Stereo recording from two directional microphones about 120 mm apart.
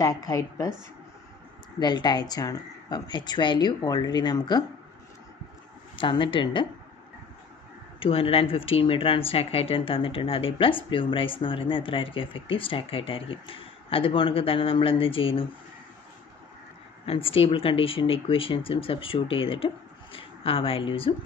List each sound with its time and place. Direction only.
0.0 s a woman's voice: 30° left (ahead or behind)
1.8 s speech: 35° left (ahead or behind)
5.9 s speech: 45° left (ahead or behind)
8.0 s speech: 50° left (ahead or behind)
17.0 s speech: 50° left (ahead or behind)